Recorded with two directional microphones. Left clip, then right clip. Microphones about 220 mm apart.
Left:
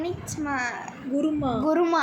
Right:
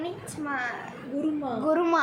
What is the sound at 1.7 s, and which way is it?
Speech, 10° left (ahead or behind).